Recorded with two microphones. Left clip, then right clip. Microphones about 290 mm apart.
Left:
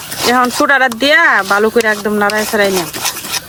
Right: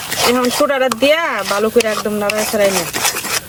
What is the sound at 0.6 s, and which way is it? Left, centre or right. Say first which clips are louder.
Speech: left 3 dB; left.